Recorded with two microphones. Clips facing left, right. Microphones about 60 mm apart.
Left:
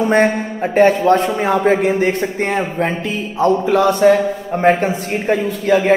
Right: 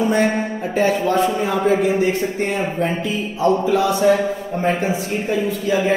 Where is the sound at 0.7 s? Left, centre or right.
Left.